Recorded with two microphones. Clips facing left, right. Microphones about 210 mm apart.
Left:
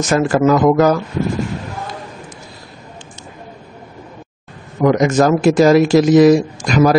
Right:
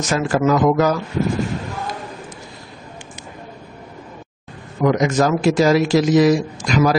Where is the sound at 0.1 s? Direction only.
55° left (ahead or behind).